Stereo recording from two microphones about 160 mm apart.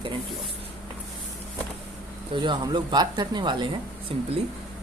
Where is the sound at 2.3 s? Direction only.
30° right (ahead or behind).